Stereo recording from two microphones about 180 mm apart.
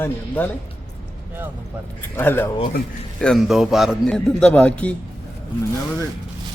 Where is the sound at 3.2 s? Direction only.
Centre (ahead or behind).